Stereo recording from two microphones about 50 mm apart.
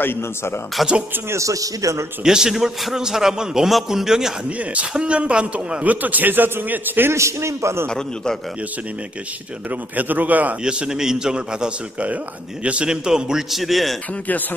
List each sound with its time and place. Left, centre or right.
0.0 s a man's voice: left
0.8 s speech: centre
1.3 s a man's voice: right
2.2 s a man's voice: centre
4.5 s a man's voice: right
7.1 s a man's voice: right
9.7 s a man's voice: right
10.6 s a man's voice: centre